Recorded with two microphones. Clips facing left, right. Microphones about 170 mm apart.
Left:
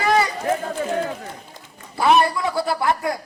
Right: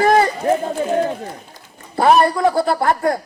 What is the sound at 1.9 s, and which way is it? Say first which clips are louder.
A man's voice: right 4 dB; 50° right (ahead or behind).